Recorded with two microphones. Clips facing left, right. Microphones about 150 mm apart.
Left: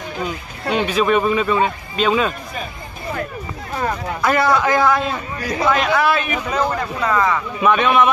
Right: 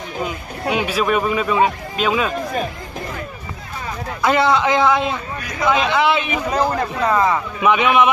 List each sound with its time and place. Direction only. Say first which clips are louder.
0.2 s speech: right 2 dB; 10° right (ahead or behind)
4.2 s a man's voice: right 1 dB; 20° right (ahead or behind)